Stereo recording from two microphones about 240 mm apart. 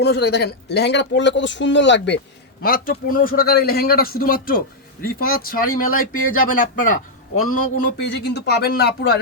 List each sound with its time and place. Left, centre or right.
0.0 s speech: left